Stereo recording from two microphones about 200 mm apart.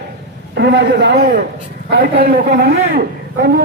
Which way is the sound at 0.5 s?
55° right (ahead or behind).